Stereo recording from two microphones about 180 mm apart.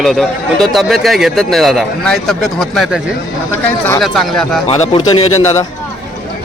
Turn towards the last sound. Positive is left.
turn(degrees=35)  # may be behind; listen again after turning